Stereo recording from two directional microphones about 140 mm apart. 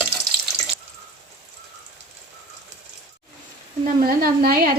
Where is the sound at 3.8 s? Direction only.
90° right.